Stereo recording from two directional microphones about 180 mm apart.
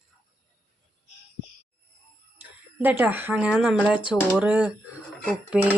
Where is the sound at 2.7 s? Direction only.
10° right (ahead or behind).